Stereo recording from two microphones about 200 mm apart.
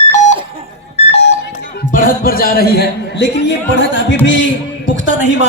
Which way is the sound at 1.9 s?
45° left (ahead or behind).